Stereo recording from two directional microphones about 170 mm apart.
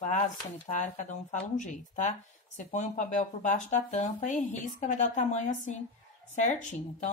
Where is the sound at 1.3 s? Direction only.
45° left (ahead or behind).